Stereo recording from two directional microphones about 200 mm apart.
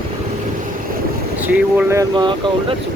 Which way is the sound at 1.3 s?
10° right (ahead or behind).